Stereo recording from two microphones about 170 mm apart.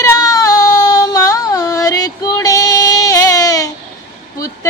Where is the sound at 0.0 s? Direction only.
20° left (ahead or behind).